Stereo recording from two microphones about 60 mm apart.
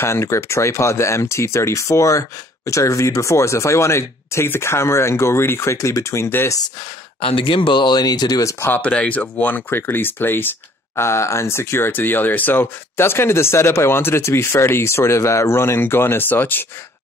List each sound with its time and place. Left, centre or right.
0.0 s speech: left
8.0 s speech: left
8.6 s speech: left
11.0 s speech: left